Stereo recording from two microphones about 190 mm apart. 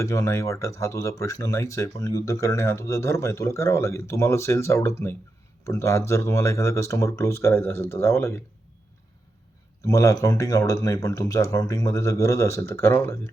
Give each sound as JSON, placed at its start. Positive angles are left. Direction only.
{"t": 0.0, "sound": "speech", "side_deg": 15}
{"t": 9.8, "sound": "speech", "side_deg": 15}